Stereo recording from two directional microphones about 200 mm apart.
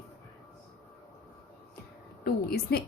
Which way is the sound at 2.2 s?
50° left (ahead or behind).